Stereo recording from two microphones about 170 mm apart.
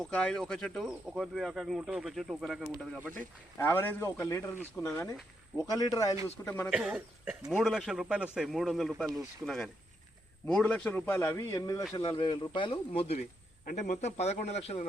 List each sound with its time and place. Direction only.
0.0 s speech: 5° left (ahead or behind)
3.6 s a man's voice: 10° left (ahead or behind)
6.7 s a man's voice: 5° right (ahead or behind); by 13.2 s 35° left (ahead or behind)
13.7 s a man's voice: 45° left (ahead or behind)